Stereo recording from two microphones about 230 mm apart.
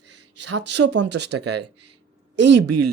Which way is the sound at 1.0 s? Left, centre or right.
Right.